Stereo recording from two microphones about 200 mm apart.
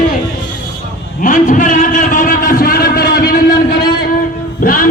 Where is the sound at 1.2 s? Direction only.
40° left (ahead or behind).